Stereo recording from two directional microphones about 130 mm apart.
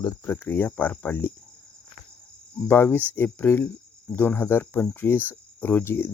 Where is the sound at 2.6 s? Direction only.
15° left (ahead or behind).